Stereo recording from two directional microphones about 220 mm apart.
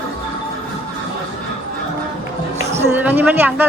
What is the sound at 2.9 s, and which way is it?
Speech, 10° right (ahead or behind).